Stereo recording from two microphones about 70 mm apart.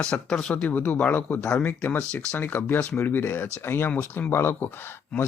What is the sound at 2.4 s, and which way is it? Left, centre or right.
Speech, left.